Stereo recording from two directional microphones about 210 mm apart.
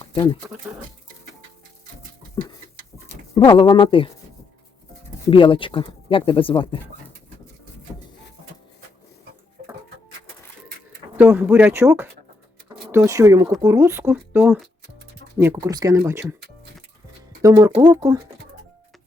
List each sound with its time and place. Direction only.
3.3 s speech: 20° left (ahead or behind)
5.3 s speech: 25° left (ahead or behind)
11.2 s speech: 10° right (ahead or behind)
17.4 s speech: 15° right (ahead or behind)